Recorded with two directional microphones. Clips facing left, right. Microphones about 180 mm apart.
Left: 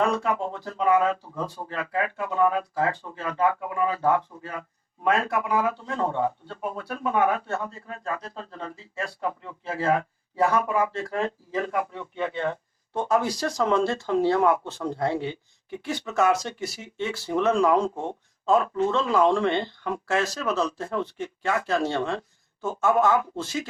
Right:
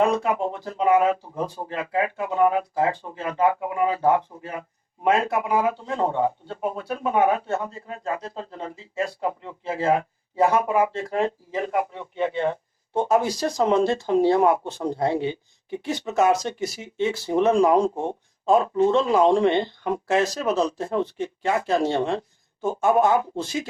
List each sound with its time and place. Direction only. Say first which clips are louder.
0.0 s a man's voice: right 3 dB; 20° right (ahead or behind)